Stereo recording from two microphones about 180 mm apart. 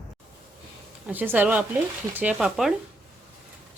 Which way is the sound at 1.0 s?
10° right (ahead or behind).